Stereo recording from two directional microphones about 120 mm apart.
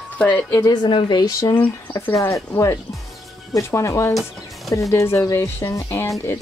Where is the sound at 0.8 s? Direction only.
40° left (ahead or behind).